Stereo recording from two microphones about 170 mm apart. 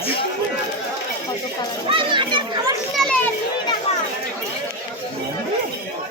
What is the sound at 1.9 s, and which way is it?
Children playing, 30° right (ahead or behind).